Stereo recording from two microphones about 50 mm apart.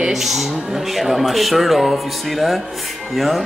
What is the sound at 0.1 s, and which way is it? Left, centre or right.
Speech, centre.